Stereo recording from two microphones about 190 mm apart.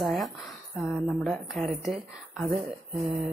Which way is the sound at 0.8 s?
Centre (ahead or behind).